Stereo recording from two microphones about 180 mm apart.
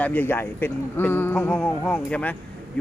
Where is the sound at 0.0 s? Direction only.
10° left (ahead or behind).